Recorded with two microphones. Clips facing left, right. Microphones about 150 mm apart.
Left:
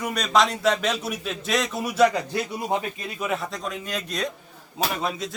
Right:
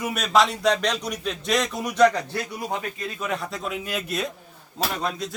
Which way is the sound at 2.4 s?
20° left (ahead or behind).